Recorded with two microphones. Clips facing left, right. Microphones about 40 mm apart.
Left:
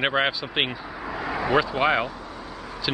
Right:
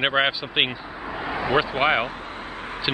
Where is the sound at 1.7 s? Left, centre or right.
Right.